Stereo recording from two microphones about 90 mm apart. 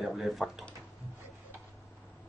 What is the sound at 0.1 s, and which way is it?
Speech, centre (ahead or behind).